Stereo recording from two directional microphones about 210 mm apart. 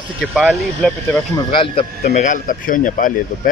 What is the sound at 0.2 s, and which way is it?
Speech, centre (ahead or behind).